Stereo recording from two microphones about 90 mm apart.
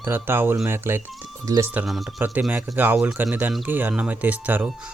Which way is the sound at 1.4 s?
40° right (ahead or behind).